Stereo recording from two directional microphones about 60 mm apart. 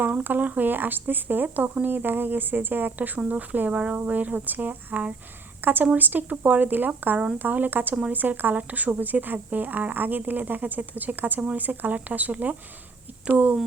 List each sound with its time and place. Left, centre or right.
0.0 s speech: right